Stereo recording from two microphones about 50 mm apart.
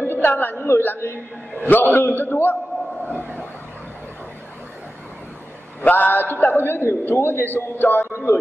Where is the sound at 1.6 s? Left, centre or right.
Left.